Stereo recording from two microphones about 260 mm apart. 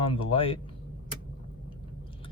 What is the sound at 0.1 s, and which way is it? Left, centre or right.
Speech, left.